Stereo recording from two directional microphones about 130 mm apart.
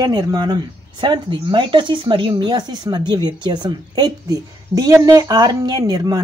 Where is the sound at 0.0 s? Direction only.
35° right (ahead or behind).